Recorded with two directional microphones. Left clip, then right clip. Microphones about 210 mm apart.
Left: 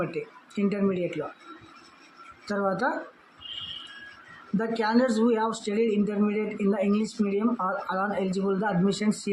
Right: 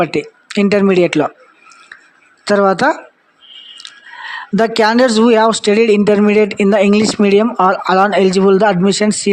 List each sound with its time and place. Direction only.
0.0 s speech: 50° right (ahead or behind)
2.5 s speech: 45° right (ahead or behind)
4.5 s speech: 45° right (ahead or behind)